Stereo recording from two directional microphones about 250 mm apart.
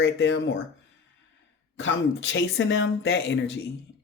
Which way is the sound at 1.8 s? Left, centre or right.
Left.